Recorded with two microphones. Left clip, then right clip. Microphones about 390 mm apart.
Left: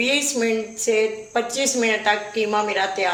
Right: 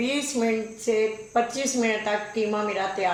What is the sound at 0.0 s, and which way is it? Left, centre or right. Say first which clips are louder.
Speech: left 5 dB; left.